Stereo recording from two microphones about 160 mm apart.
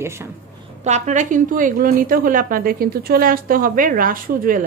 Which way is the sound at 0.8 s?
45° right (ahead or behind).